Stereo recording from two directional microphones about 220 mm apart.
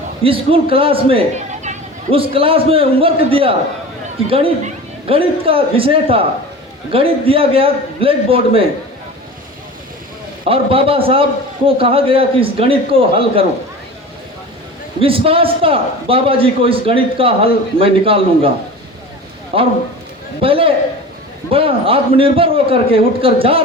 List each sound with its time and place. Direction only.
0.2 s a man's voice: 25° right (ahead or behind)
10.4 s a man's voice: 25° right (ahead or behind)
15.0 s a man's voice: 25° right (ahead or behind)
19.5 s a man's voice: 25° right (ahead or behind)